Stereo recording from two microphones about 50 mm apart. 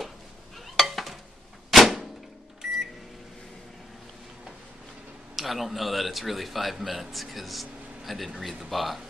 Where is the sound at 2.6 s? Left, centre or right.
Centre.